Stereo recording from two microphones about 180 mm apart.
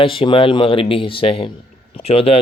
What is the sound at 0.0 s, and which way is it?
Speech, 25° left (ahead or behind).